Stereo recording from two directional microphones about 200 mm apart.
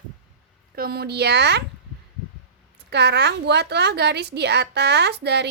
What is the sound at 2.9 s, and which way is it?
A woman's voice, 55° right (ahead or behind).